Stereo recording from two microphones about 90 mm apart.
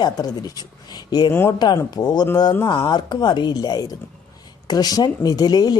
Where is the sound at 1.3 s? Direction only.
25° left (ahead or behind).